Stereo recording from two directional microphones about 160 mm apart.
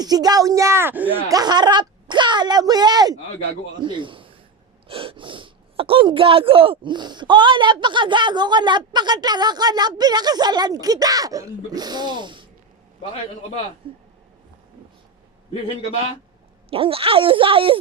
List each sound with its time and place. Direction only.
0.0 s speech: 25° right (ahead or behind)
1.3 s a man's voice: 25° right (ahead or behind)
16.6 s speech: 35° right (ahead or behind)